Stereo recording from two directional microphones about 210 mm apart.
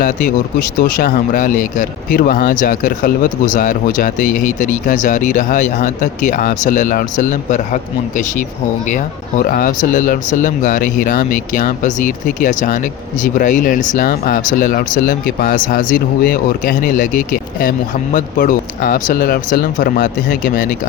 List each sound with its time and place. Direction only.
0.8 s speech: 45° left (ahead or behind)